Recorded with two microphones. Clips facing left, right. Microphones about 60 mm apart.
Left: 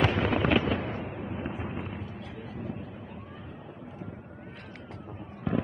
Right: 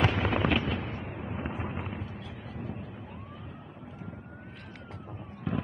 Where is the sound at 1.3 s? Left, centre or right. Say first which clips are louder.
Right 2 dB; centre.